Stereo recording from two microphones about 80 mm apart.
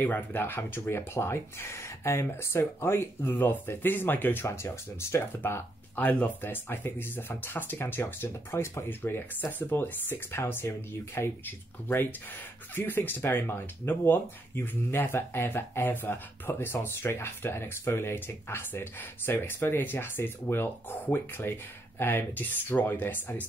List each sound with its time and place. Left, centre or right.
0.0 s speech: left